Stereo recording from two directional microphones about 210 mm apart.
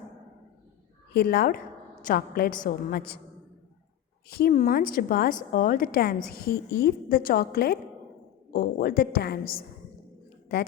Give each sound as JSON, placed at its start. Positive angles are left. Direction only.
{"t": 1.1, "sound": "a woman's voice", "side_deg": 45}
{"t": 4.3, "sound": "a woman's voice", "side_deg": 45}